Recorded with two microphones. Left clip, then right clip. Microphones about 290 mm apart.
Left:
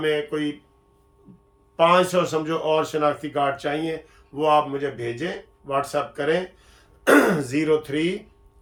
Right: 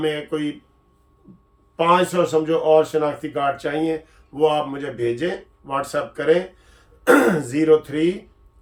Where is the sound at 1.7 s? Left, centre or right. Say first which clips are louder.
Even; centre.